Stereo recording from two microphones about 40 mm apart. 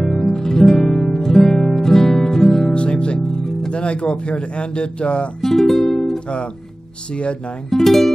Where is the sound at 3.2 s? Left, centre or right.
Centre.